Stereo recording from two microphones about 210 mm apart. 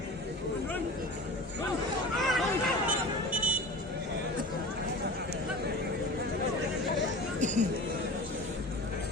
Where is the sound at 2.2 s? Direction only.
Centre (ahead or behind).